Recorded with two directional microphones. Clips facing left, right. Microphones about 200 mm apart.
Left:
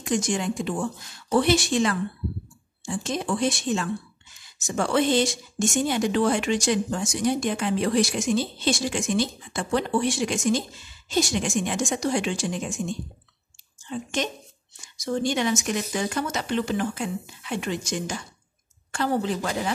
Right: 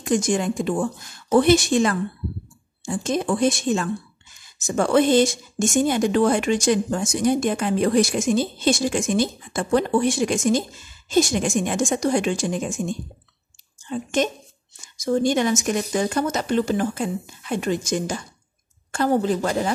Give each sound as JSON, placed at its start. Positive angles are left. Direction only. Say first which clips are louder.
{"t": 0.0, "sound": "a woman's voice", "louder": "right 4 dB", "side_deg": -50}